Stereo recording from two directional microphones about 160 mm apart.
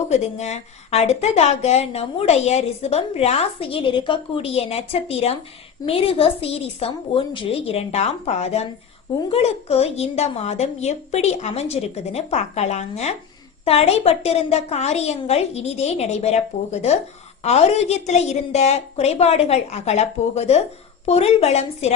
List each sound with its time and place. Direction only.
0.1 s a woman's voice: 45° left (ahead or behind)